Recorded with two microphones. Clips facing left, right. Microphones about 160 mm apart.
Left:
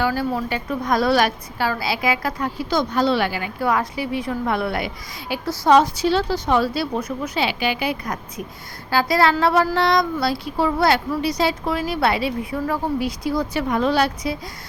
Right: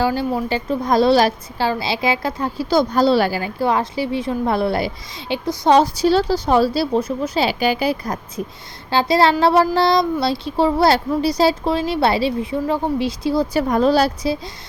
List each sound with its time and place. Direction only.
0.0 s a woman's voice: 25° right (ahead or behind)